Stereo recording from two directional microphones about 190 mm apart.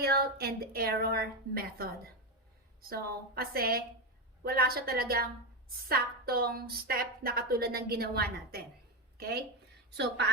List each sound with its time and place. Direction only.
0.0 s a woman's voice: 55° right (ahead or behind)
2.9 s a woman's voice: 50° right (ahead or behind)